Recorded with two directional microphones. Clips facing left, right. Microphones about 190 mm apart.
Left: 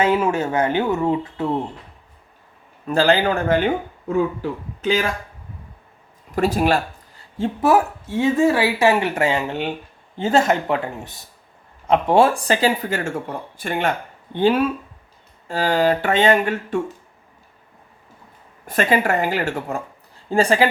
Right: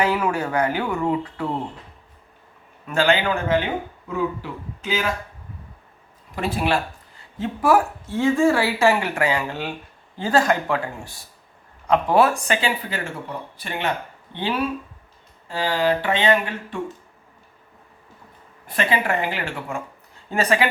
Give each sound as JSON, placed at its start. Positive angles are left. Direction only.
{"t": 0.0, "sound": "speech", "side_deg": 25}
{"t": 2.8, "sound": "speech", "side_deg": 35}
{"t": 6.3, "sound": "speech", "side_deg": 45}
{"t": 7.3, "sound": "speech", "side_deg": 25}
{"t": 18.6, "sound": "speech", "side_deg": 45}